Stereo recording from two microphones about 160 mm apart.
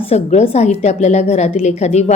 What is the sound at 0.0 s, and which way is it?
A woman's voice, 40° left (ahead or behind).